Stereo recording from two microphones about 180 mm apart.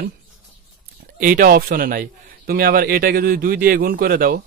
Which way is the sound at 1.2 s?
55° right (ahead or behind).